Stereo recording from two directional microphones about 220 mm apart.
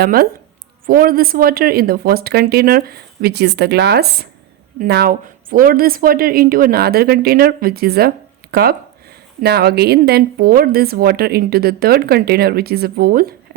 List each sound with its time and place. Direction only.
0.0 s a woman's voice: 40° right (ahead or behind)